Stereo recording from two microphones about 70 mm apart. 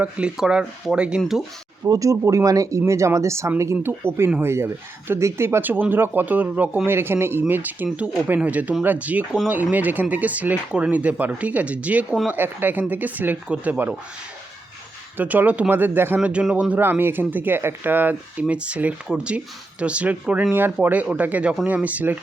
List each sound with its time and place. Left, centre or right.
0.3 s speech: centre
1.8 s speech: right
6.8 s speech: right
15.2 s speech: right
16.2 s speech: centre
16.8 s speech: right